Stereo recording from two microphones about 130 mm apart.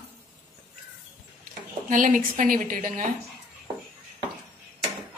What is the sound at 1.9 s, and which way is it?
A woman's voice, 90° right.